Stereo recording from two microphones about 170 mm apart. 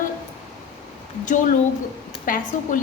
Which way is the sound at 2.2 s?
55° left (ahead or behind).